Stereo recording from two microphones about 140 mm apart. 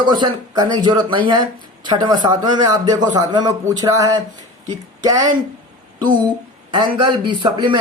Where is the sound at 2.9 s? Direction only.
30° right (ahead or behind).